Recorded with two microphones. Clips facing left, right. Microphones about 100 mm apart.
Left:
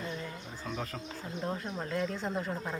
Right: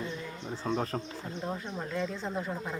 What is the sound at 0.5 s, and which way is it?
Speech, 35° right (ahead or behind).